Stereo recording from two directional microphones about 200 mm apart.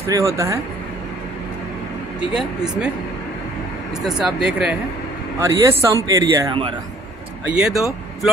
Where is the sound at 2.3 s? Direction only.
5° right (ahead or behind).